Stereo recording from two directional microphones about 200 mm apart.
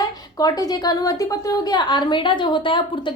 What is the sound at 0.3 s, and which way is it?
A woman's voice, 20° left (ahead or behind).